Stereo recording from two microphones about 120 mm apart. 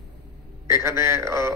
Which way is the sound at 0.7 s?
25° right (ahead or behind).